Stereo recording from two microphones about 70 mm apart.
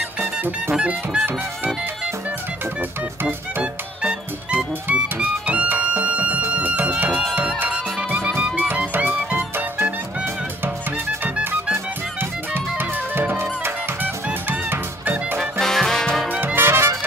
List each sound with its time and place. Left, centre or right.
0.2 s music: right
0.7 s music: centre
5.0 s music: centre
8.4 s music: centre
11.2 s music: centre
11.7 s music: right
15.6 s music: centre
16.3 s music: right